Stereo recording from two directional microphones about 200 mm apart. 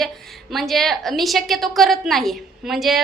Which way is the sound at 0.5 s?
Centre (ahead or behind).